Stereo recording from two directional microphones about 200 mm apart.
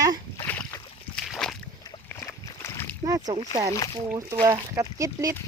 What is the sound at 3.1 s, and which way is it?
Speech, 20° right (ahead or behind).